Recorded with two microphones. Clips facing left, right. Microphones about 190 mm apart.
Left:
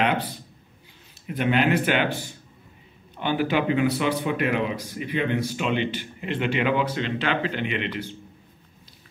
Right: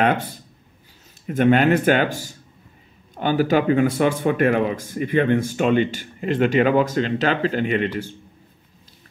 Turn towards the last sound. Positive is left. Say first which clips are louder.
# right 6 dB
turn(degrees=-45)  # may be behind; listen again after turning